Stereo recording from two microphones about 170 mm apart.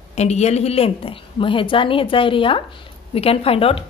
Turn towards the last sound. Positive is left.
turn(degrees=35)  # may be behind; listen again after turning